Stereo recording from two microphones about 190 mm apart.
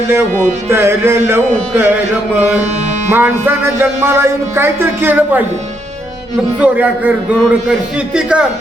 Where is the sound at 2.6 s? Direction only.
35° right (ahead or behind).